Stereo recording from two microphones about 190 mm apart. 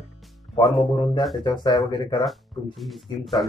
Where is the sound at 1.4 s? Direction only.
25° left (ahead or behind).